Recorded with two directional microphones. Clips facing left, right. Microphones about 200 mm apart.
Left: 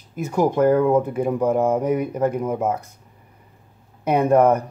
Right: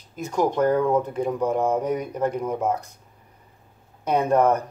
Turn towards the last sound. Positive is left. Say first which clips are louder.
# left 3 dB
turn(degrees=10)  # may be behind; listen again after turning